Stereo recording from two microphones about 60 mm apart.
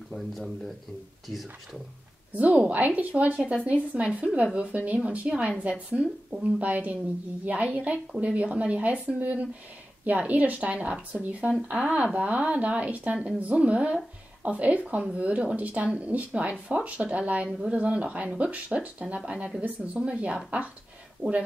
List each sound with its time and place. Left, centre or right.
2.3 s speech: right
17.5 s speech: centre
17.7 s speech: right